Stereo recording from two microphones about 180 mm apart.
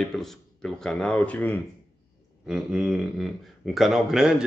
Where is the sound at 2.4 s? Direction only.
5° right (ahead or behind).